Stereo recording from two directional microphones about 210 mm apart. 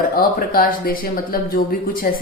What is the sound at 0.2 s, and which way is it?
Speech, 45° left (ahead or behind).